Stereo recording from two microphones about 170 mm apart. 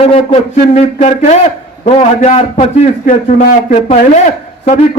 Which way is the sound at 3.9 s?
45° left (ahead or behind).